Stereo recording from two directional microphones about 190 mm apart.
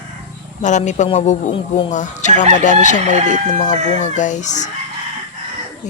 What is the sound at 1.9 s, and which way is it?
Speech, 40° left (ahead or behind).